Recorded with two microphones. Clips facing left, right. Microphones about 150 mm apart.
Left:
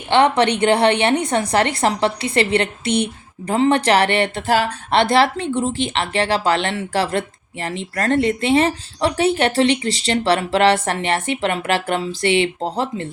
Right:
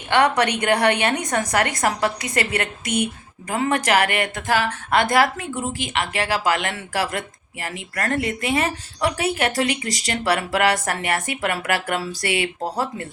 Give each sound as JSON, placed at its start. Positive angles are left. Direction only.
{"t": 0.1, "sound": "a woman's voice", "side_deg": 25}